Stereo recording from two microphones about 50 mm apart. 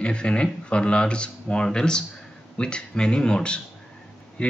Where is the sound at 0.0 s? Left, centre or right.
Left.